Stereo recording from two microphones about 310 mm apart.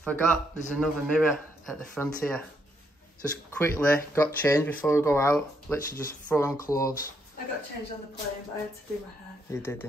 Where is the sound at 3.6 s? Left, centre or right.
Centre.